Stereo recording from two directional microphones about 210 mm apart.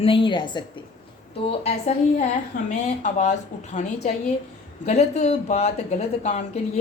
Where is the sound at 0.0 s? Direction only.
25° left (ahead or behind).